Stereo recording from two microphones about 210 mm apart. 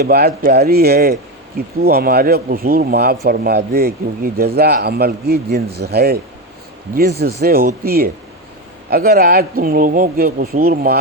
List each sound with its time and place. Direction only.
0.0 s speech: 50° right (ahead or behind)